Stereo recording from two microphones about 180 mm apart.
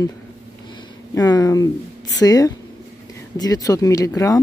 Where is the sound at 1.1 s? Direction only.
20° left (ahead or behind).